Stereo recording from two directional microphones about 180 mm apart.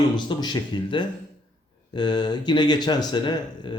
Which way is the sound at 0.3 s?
25° left (ahead or behind).